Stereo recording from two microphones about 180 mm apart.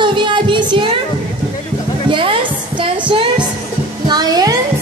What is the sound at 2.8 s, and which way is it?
Music, 30° right (ahead or behind).